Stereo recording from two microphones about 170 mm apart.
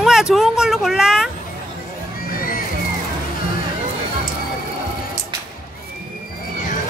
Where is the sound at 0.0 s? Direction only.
Centre (ahead or behind).